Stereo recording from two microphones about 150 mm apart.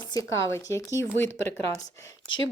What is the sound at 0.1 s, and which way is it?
Speech, 20° left (ahead or behind).